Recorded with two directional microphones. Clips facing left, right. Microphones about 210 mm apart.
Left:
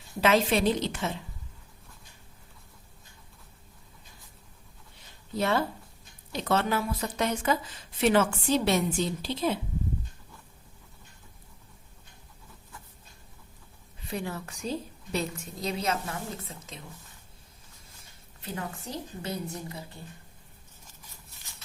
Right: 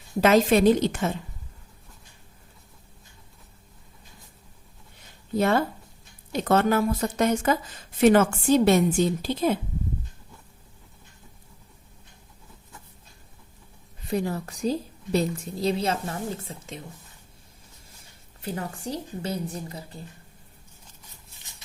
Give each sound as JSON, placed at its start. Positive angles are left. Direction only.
{"t": 0.2, "sound": "a woman's voice", "side_deg": -45}
{"t": 5.4, "sound": "a woman's voice", "side_deg": -50}
{"t": 14.1, "sound": "a woman's voice", "side_deg": -40}
{"t": 18.4, "sound": "a woman's voice", "side_deg": -30}